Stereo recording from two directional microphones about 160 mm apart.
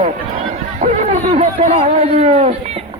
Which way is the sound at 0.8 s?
50° right (ahead or behind).